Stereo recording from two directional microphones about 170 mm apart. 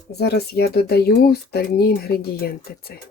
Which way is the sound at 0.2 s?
75° left (ahead or behind).